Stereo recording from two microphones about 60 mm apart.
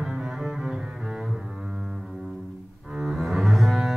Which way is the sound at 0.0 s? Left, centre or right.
Centre.